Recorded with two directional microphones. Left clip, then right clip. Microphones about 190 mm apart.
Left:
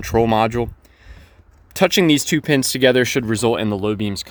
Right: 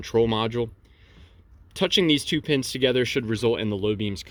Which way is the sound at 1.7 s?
45° left (ahead or behind).